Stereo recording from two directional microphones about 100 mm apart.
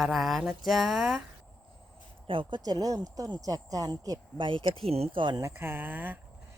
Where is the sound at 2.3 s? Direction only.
55° right (ahead or behind); by 4.2 s 35° right (ahead or behind).